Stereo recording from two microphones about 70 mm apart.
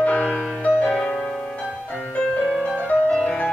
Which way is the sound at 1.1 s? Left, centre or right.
Centre.